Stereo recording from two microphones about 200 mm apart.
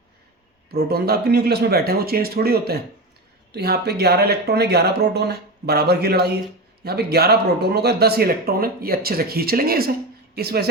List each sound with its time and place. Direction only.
0.7 s speech: 50° right (ahead or behind)